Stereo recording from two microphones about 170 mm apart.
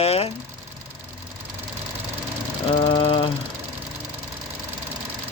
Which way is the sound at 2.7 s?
30° left (ahead or behind).